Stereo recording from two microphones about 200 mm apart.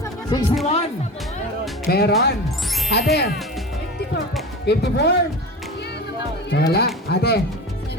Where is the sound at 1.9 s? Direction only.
50° left (ahead or behind).